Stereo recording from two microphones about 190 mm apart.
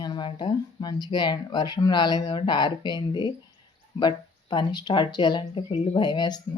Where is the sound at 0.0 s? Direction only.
25° left (ahead or behind).